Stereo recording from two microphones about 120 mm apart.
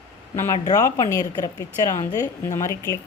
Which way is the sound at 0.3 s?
25° left (ahead or behind).